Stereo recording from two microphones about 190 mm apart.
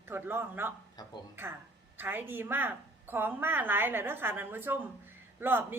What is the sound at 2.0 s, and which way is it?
A woman's voice, 10° right (ahead or behind).